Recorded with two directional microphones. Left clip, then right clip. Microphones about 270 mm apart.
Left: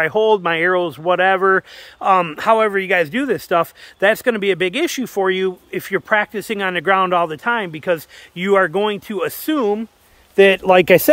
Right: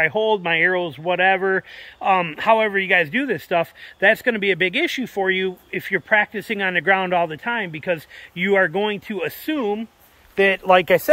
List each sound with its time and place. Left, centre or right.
0.0 s speech: centre
10.3 s speech: left